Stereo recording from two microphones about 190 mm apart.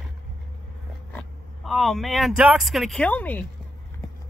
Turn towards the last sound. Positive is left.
turn(degrees=10)  # may be behind; listen again after turning